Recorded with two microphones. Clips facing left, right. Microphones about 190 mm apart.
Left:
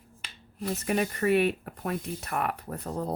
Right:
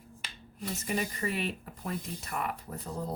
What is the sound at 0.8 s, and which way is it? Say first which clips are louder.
Speech: left 7 dB; 60° left (ahead or behind).